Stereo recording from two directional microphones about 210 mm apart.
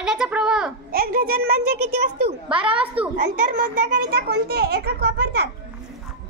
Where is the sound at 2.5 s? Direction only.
25° right (ahead or behind).